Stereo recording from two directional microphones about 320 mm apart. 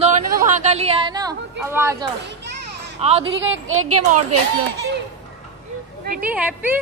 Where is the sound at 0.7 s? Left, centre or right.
Centre.